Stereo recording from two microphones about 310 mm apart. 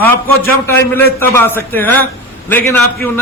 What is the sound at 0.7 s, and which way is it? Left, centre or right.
A man's voice, centre.